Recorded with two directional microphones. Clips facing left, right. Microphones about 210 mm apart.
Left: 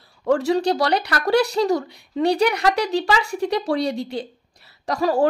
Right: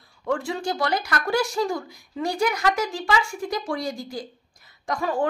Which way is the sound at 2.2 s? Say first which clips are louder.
Left 5 dB; 70° left (ahead or behind).